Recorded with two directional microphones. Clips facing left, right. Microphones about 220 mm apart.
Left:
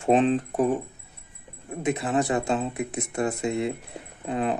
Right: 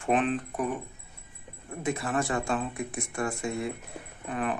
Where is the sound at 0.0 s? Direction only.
25° left (ahead or behind).